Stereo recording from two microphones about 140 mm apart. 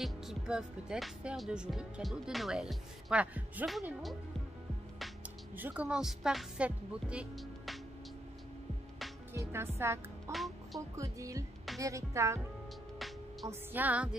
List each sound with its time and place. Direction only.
0.0 s speech: 5° right (ahead or behind)
5.6 s speech: 10° right (ahead or behind)
9.3 s music: 20° right (ahead or behind)
9.8 s speech: 20° right (ahead or behind)
10.3 s music: centre (ahead or behind)
11.0 s speech: 25° right (ahead or behind)
13.5 s music: 10° right (ahead or behind)